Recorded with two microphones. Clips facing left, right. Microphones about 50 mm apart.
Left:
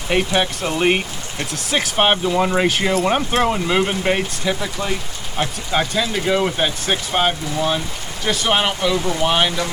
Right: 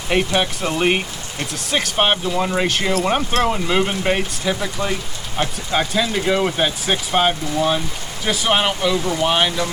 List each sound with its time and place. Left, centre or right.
0.3 s speech: centre